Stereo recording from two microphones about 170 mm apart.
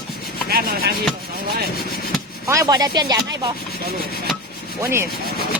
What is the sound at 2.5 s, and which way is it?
Speech, 20° right (ahead or behind).